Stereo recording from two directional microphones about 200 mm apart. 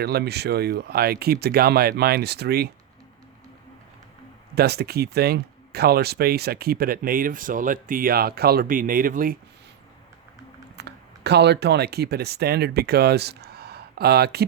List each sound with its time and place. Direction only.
0.0 s speech: 55° right (ahead or behind)
4.5 s speech: 55° right (ahead or behind)
10.8 s speech: 55° right (ahead or behind)